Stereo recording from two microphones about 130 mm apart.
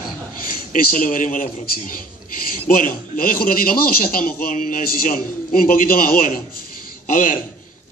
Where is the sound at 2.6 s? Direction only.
90° left.